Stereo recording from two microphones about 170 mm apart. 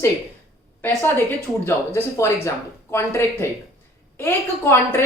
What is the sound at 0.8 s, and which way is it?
A woman's voice, 15° left (ahead or behind).